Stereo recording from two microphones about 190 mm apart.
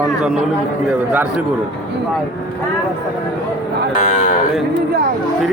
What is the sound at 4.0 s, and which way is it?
Speech, 40° left (ahead or behind).